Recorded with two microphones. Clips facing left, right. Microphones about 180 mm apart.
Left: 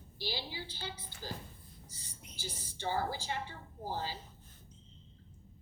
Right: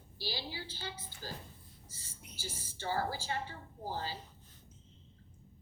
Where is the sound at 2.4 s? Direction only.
15° left (ahead or behind).